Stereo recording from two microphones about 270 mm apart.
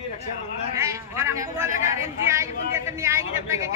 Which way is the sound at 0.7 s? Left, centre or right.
Centre.